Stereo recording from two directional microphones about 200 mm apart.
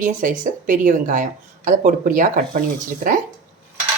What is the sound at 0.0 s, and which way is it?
Speech, 40° right (ahead or behind).